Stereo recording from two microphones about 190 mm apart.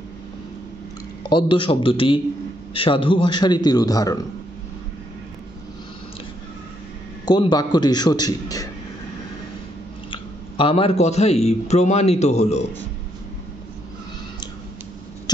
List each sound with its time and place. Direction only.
1.2 s a man's voice: 25° left (ahead or behind)
7.2 s a man's voice: 20° left (ahead or behind)
10.1 s a man's voice: 30° left (ahead or behind)
15.3 s a sound: 20° left (ahead or behind)